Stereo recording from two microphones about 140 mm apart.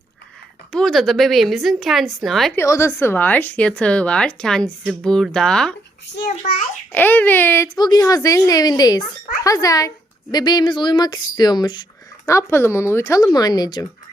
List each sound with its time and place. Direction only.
0.7 s speech: 5° left (ahead or behind)
2.6 s speech: 20° left (ahead or behind)
6.3 s a child's voice: 60° left (ahead or behind)
6.9 s speech: 10° left (ahead or behind)
7.8 s speech: 30° left (ahead or behind)
12.2 s speech: 20° left (ahead or behind)